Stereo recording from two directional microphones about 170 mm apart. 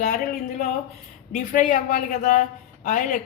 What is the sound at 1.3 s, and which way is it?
Speech, 50° left (ahead or behind).